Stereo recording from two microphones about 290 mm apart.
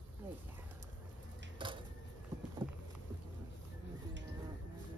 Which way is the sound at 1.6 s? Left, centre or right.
Centre.